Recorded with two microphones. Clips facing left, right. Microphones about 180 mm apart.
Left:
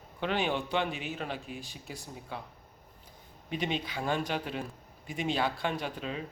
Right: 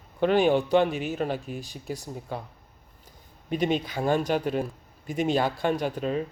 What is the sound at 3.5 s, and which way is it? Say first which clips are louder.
A man's voice: right 7 dB; 45° right (ahead or behind).